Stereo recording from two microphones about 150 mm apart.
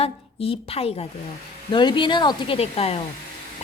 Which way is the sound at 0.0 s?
40° left (ahead or behind).